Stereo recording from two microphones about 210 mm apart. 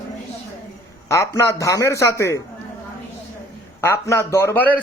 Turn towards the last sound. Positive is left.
turn(degrees=10)  # may be behind; listen again after turning